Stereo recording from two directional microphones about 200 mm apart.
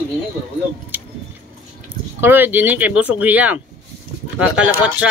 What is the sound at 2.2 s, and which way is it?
Speech, 10° right (ahead or behind).